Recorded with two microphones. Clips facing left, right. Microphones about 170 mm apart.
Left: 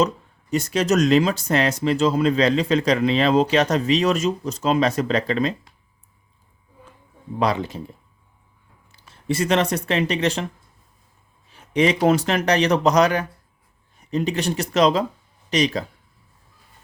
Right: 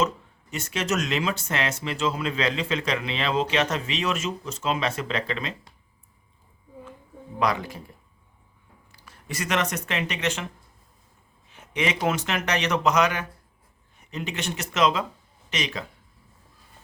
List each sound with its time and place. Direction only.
0.5 s speech: 35° left (ahead or behind)
7.3 s speech: 30° left (ahead or behind)
8.9 s speech: 25° left (ahead or behind)
11.5 s speech: 35° left (ahead or behind)